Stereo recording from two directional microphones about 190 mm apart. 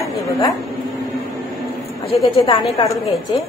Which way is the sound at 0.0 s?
15° left (ahead or behind).